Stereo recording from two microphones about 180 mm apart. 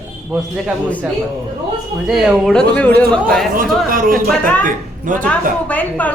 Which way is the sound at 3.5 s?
50° right (ahead or behind).